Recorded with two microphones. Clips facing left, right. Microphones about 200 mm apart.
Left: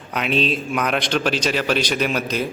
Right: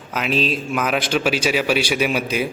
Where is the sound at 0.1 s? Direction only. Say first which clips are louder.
Even; centre (ahead or behind).